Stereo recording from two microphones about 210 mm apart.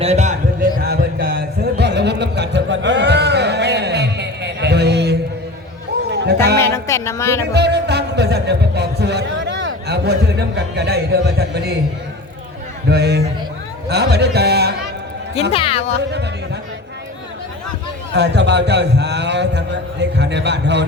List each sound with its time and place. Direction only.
0.0 s music: 30° right (ahead or behind)
0.9 s music: 50° right (ahead or behind)
6.7 s music: 15° left (ahead or behind)
7.5 s music: 50° right (ahead or behind)
12.9 s a man's voice: 50° right (ahead or behind)
15.4 s speech: 25° left (ahead or behind)
18.1 s a man's voice: 55° right (ahead or behind)